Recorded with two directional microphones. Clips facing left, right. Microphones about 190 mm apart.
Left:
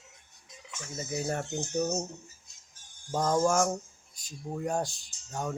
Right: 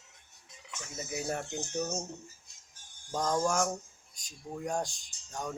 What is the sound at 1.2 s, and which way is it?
Speech, 5° right (ahead or behind).